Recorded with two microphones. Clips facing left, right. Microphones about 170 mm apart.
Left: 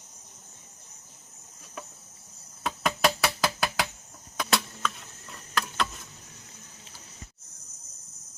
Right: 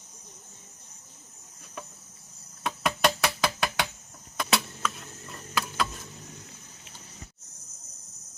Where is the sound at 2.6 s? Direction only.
Centre (ahead or behind).